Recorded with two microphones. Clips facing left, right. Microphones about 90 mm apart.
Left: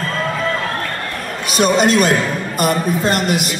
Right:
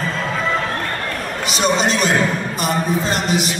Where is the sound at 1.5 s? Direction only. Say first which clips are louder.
Left 5 dB; 50° left (ahead or behind).